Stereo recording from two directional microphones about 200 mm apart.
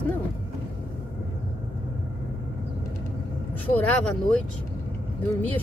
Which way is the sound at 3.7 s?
5° left (ahead or behind).